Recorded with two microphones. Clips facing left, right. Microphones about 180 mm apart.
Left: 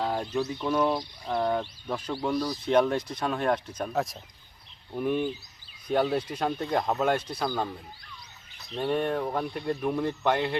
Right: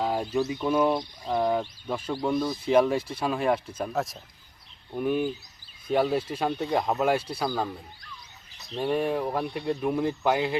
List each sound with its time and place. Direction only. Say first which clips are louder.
0.0 s a sound: right 2 dB; 5° right (ahead or behind)
1.2 s speech: right 2 dB; 5° right (ahead or behind)
2.3 s speech: right 2 dB; 25° right (ahead or behind)
2.6 s speech: right 2 dB; 5° right (ahead or behind)
8.7 s speech: right 1 dB; 5° right (ahead or behind)